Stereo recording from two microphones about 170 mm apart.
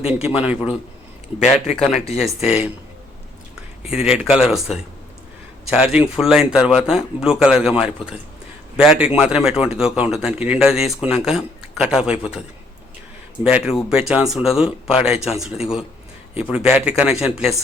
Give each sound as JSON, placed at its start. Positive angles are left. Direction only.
{"t": 0.1, "sound": "a man's voice", "side_deg": -5}
{"t": 1.5, "sound": "speech", "side_deg": 40}
{"t": 2.1, "sound": "a man's voice", "side_deg": -5}
{"t": 3.8, "sound": "a man's voice", "side_deg": -5}
{"t": 13.4, "sound": "a man's voice", "side_deg": -5}